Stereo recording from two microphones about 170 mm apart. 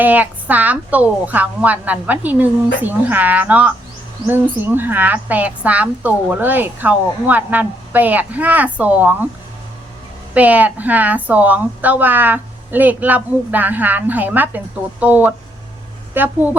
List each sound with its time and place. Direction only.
0.0 s a woman's voice: 10° right (ahead or behind)
10.3 s a woman's voice: 10° right (ahead or behind)